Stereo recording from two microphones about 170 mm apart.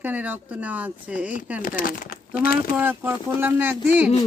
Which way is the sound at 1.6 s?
55° left (ahead or behind).